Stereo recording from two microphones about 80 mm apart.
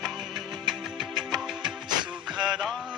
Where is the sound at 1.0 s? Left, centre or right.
Centre.